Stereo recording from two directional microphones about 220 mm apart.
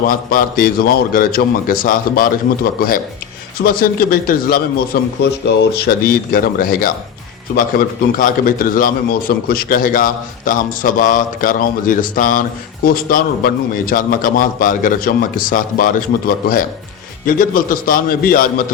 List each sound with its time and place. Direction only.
0.1 s a man's voice: 40° left (ahead or behind)